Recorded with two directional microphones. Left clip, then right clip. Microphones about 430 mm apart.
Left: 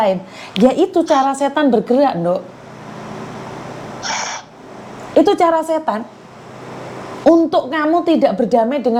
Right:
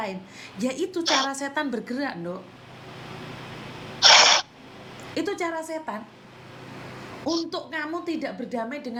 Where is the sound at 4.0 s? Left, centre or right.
Right.